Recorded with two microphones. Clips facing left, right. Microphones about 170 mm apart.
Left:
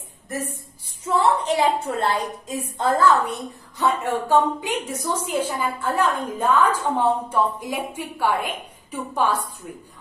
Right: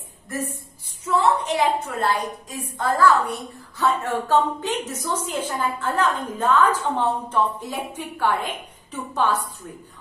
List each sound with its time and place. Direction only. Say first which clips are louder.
1.4 s a woman's voice: left 1 dB; 25° left (ahead or behind); by 9.4 s 10° left (ahead or behind)